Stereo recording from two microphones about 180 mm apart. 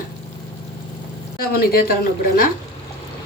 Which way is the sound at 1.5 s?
60° left (ahead or behind).